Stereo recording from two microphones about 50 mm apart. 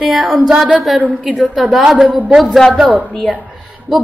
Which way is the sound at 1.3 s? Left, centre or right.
Centre.